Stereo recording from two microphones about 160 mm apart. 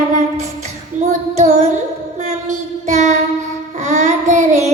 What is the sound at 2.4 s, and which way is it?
Music, 45° right (ahead or behind).